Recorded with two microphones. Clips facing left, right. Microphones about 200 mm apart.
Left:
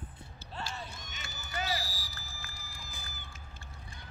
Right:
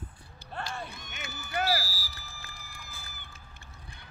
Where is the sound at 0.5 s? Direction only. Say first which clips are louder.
Right 4 dB; 55° right (ahead or behind).